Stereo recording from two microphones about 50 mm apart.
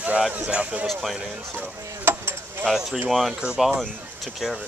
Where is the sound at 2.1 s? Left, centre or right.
Right.